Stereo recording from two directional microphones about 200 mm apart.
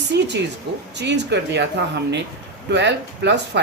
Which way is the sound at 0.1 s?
60° right (ahead or behind).